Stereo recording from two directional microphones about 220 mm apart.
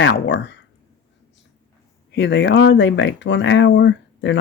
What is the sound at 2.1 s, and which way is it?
Speech, 50° left (ahead or behind).